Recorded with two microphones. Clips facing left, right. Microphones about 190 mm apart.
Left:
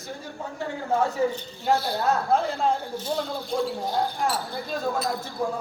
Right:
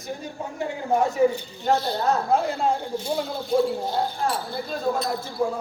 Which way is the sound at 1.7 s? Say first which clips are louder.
Right 1 dB; 10° left (ahead or behind).